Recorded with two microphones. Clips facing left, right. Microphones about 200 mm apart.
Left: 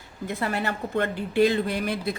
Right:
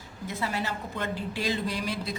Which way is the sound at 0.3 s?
60° left (ahead or behind).